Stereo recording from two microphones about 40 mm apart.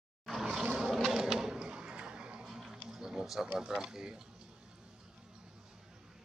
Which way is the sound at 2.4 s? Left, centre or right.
Centre.